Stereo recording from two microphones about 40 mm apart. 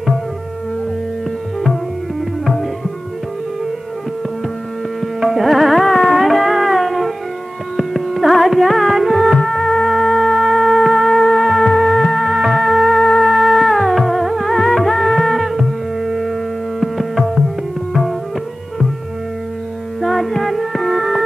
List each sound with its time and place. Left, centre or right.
5.2 s music: centre
12.2 s music: centre
13.8 s music: centre
14.5 s music: centre
16.8 s tabla: centre
20.0 s music: centre